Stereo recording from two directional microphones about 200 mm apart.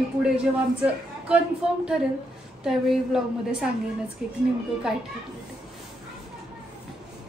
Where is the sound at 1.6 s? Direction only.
5° right (ahead or behind).